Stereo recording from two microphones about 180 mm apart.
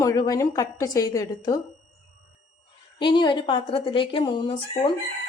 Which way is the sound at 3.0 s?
25° left (ahead or behind).